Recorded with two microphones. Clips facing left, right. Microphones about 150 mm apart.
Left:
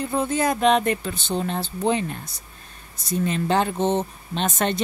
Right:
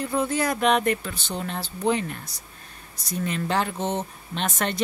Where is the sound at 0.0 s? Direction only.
25° left (ahead or behind).